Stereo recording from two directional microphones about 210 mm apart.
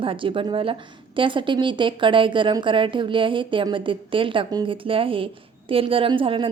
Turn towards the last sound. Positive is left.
turn(degrees=-25)  # may be behind; listen again after turning